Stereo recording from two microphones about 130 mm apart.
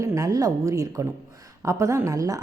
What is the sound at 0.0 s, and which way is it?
A woman's voice, 25° right (ahead or behind).